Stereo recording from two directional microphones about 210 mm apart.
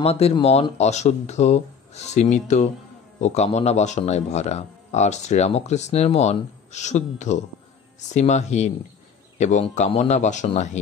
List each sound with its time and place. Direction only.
0.0 s a man's voice: 30° left (ahead or behind)